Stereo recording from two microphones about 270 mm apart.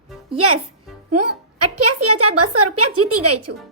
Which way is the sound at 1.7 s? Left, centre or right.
Right.